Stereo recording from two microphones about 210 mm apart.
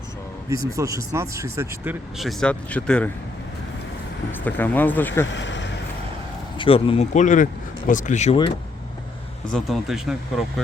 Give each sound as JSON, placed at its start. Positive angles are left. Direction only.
{"t": 0.5, "sound": "speech", "side_deg": -15}
{"t": 4.3, "sound": "speech", "side_deg": 10}
{"t": 5.3, "sound": "a sound", "side_deg": 60}
{"t": 6.6, "sound": "speech", "side_deg": 25}
{"t": 9.5, "sound": "speech", "side_deg": 0}